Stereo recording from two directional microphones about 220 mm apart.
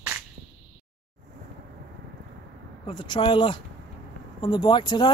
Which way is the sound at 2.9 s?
20° left (ahead or behind).